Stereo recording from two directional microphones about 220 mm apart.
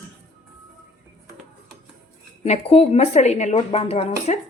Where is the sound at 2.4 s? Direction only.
25° left (ahead or behind).